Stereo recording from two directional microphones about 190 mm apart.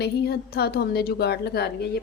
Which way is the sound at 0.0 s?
55° left (ahead or behind).